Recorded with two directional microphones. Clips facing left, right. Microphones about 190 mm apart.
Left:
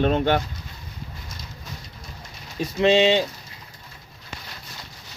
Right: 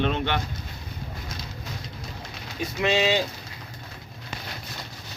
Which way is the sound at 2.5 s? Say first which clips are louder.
Left 6 dB; 30° left (ahead or behind).